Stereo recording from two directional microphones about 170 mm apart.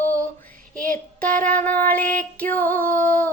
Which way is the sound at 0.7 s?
55° right (ahead or behind).